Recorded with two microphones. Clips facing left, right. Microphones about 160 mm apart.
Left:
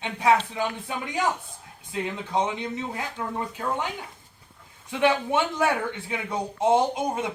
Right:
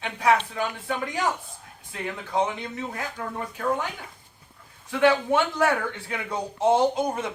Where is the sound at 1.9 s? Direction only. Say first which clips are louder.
Left 1 dB; 20° left (ahead or behind).